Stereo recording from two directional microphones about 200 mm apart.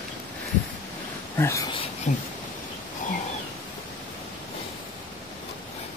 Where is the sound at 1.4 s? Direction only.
15° left (ahead or behind).